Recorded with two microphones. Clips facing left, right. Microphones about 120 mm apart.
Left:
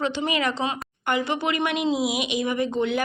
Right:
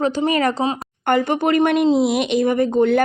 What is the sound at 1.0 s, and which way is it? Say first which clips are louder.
Speech: right 7 dB; 50° right (ahead or behind).